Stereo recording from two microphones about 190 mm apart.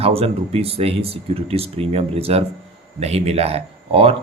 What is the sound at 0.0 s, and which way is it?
Speech, 30° right (ahead or behind).